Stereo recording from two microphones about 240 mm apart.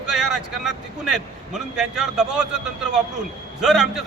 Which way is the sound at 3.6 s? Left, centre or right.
Centre.